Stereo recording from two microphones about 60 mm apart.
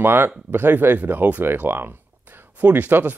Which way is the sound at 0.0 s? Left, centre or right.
Right.